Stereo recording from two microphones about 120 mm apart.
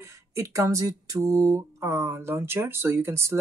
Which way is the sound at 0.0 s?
25° right (ahead or behind).